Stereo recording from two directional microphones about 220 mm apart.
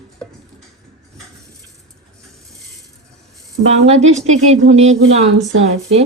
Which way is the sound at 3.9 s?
30° right (ahead or behind).